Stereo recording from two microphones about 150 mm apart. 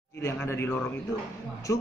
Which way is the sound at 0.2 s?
15° left (ahead or behind).